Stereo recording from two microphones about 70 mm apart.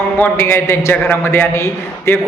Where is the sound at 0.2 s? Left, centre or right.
Left.